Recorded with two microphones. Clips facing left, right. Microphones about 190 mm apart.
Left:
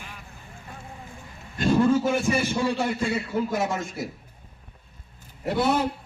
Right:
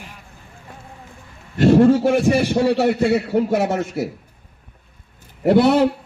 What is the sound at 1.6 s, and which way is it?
A man's voice, 70° right (ahead or behind).